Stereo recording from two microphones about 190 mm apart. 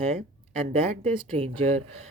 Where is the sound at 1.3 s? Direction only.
30° right (ahead or behind).